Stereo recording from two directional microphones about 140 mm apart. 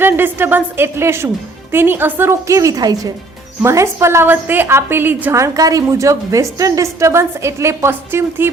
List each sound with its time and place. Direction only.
0.0 s a woman's voice: 15° right (ahead or behind)